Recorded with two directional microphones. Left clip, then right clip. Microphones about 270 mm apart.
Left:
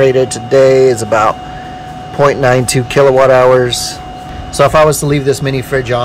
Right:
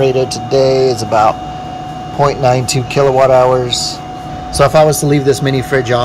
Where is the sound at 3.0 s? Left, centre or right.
Left.